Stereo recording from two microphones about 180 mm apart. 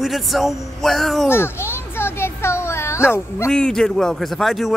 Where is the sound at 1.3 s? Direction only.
15° left (ahead or behind).